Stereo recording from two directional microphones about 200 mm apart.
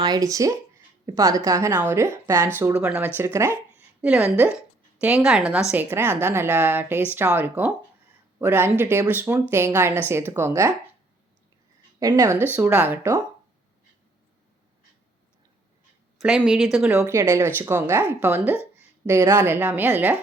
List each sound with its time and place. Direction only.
0.0 s a woman's voice: 20° right (ahead or behind)
11.9 s speech: 15° right (ahead or behind)
16.5 s speech: centre (ahead or behind)